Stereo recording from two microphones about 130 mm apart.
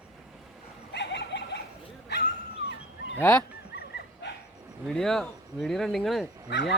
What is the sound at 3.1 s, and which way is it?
Honk, 20° left (ahead or behind).